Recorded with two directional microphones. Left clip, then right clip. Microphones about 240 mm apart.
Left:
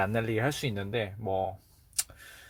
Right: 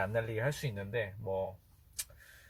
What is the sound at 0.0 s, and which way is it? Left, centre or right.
Speech, left.